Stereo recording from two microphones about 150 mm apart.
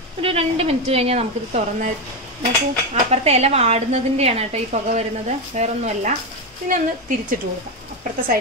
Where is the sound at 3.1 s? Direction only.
45° right (ahead or behind).